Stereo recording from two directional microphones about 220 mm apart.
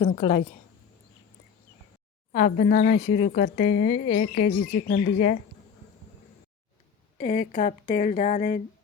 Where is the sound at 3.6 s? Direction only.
25° left (ahead or behind).